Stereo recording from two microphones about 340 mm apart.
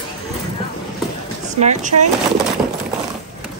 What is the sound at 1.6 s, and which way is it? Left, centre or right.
Speech, right.